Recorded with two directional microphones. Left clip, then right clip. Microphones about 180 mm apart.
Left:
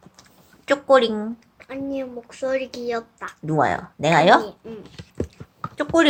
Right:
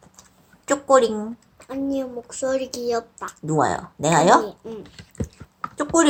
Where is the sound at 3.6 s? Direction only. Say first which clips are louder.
Left 1 dB; 40° left (ahead or behind).